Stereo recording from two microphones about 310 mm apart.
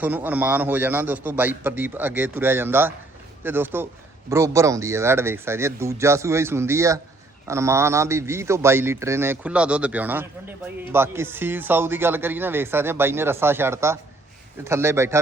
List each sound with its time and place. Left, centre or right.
0.0 s a man's voice: centre